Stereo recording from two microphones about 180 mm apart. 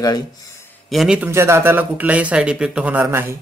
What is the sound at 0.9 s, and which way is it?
Speech, 5° right (ahead or behind).